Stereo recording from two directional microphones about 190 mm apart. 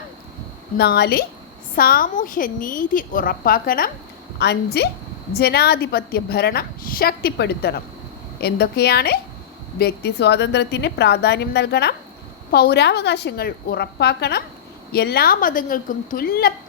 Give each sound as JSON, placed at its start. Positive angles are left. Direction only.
{"t": 0.8, "sound": "a woman's voice", "side_deg": 55}